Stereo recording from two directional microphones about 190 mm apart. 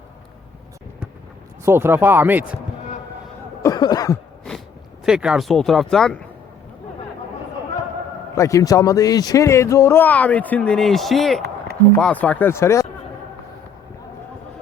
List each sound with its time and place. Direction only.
1.6 s speech: 10° right (ahead or behind)
3.6 s a sound: 20° left (ahead or behind)
5.0 s speech: 5° right (ahead or behind)
8.4 s speech: 15° left (ahead or behind)